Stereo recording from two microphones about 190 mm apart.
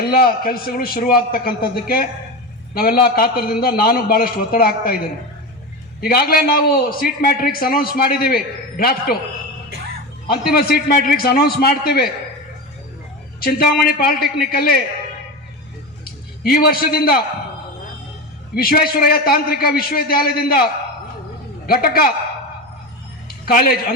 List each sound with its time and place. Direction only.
0.1 s a man's voice: 50° left (ahead or behind)
10.2 s a man's voice: 55° left (ahead or behind)
13.4 s a man's voice: 50° left (ahead or behind)
16.4 s a man's voice: 50° left (ahead or behind)
18.5 s a man's voice: 50° left (ahead or behind)
21.7 s a man's voice: 50° left (ahead or behind)
23.5 s a man's voice: 50° left (ahead or behind)